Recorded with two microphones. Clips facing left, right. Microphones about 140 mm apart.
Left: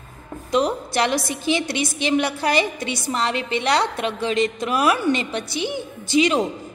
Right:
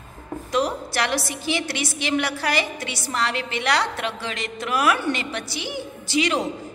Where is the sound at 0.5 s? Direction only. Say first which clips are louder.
Left 3 dB; 20° left (ahead or behind).